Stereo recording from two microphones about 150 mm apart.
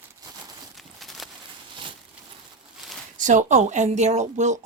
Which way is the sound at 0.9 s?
Centre (ahead or behind).